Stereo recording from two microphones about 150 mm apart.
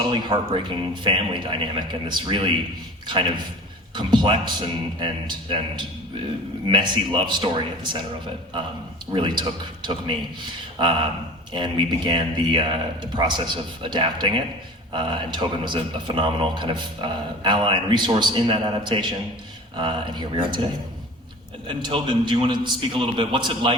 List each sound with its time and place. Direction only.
0.1 s a man's voice: 30° right (ahead or behind)
9.1 s a man's voice: 30° right (ahead or behind)
21.7 s a man's voice: 30° right (ahead or behind)